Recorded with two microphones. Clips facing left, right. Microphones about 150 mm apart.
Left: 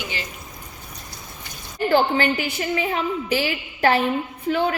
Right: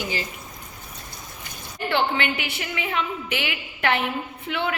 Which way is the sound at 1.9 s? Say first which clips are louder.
Left 5 dB; 35° left (ahead or behind).